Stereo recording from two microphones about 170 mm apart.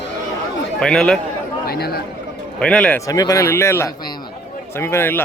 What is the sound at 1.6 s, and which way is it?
Speech, 65° left (ahead or behind).